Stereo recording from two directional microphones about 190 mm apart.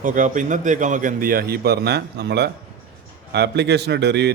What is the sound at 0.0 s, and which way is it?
A man's voice, 45° right (ahead or behind).